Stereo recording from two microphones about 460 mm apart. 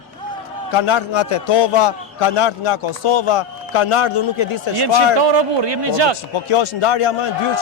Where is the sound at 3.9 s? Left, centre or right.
Left.